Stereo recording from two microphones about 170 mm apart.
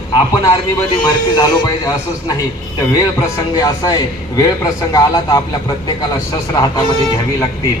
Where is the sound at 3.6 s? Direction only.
20° left (ahead or behind).